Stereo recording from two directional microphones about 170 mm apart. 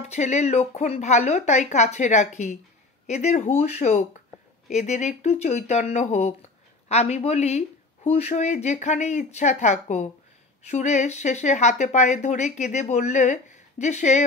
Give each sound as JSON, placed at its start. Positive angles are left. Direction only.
{"t": 0.0, "sound": "a woman's voice", "side_deg": 40}